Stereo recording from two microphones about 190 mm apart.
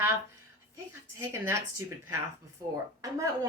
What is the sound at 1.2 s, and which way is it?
Speech, 15° right (ahead or behind).